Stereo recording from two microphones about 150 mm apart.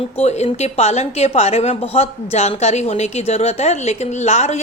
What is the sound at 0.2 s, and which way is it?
A woman's voice, 45° left (ahead or behind).